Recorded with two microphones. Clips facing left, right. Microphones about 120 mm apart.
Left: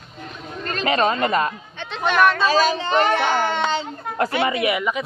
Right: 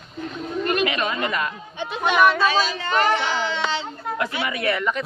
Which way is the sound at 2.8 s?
25° left (ahead or behind).